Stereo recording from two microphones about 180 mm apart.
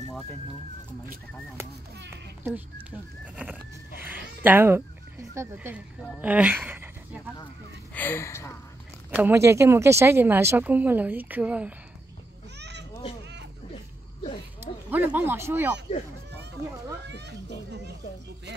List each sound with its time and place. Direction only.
3.4 s speech: 10° right (ahead or behind)
7.9 s speech: 10° left (ahead or behind)
9.1 s speech: 10° right (ahead or behind)
12.5 s a sound: 70° right (ahead or behind)
14.9 s speech: 10° right (ahead or behind)
17.0 s children playing: 70° right (ahead or behind)